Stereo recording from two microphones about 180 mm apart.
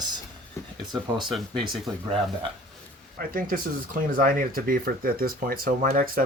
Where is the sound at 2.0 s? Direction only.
30° right (ahead or behind).